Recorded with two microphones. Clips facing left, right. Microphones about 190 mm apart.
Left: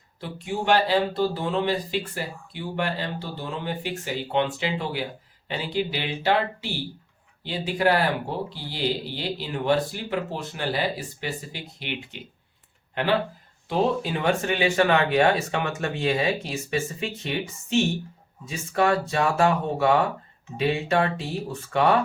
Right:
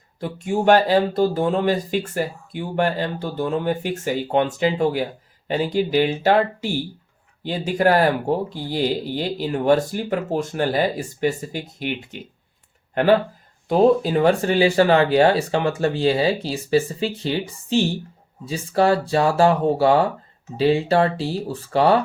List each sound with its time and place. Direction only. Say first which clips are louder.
0.2 s speech: right 7 dB; 45° right (ahead or behind)